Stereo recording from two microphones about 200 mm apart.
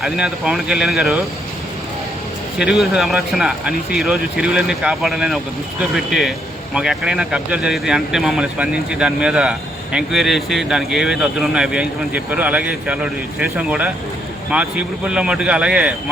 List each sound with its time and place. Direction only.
0.0 s speech: centre (ahead or behind)
2.6 s speech: 5° right (ahead or behind)